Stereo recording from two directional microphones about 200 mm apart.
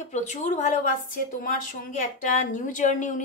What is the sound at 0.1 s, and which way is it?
Speech, 35° left (ahead or behind).